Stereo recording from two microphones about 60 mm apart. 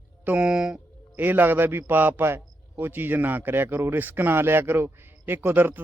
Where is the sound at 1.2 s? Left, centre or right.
Right.